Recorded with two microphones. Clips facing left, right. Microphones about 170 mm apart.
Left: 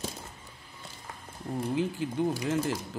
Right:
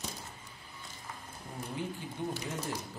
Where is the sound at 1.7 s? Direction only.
90° left.